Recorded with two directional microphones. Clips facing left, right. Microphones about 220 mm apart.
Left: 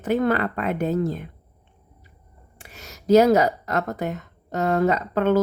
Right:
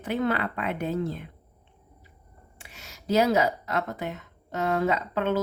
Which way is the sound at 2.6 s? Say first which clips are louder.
Left 8 dB; 40° left (ahead or behind).